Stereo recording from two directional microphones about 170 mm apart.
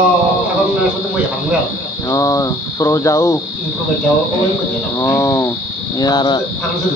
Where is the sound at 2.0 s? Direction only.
20° left (ahead or behind).